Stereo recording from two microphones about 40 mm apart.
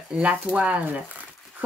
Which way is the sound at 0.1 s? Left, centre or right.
Right.